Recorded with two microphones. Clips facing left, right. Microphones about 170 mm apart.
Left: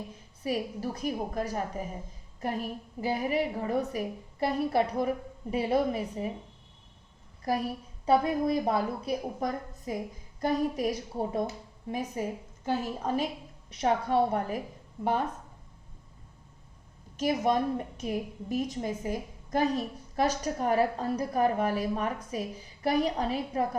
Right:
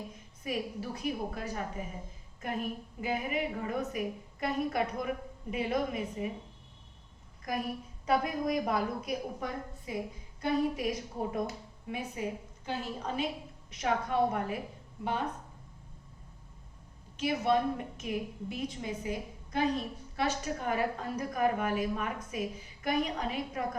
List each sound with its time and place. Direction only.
0.4 s a woman's voice: 35° left (ahead or behind)
7.5 s a woman's voice: 35° left (ahead or behind)
13.7 s a woman's voice: 35° left (ahead or behind)
17.2 s a woman's voice: 40° left (ahead or behind)